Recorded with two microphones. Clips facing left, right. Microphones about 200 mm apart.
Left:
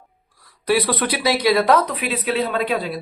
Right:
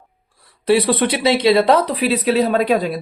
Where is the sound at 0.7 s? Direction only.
25° right (ahead or behind).